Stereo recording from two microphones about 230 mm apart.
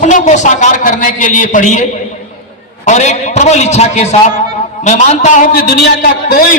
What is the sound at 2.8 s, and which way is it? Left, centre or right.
A man's voice, left.